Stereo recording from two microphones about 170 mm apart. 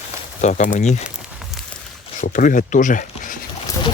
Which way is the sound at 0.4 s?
45° left (ahead or behind).